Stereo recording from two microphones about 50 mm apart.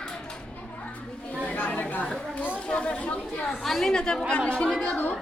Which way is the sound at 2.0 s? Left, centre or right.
Centre.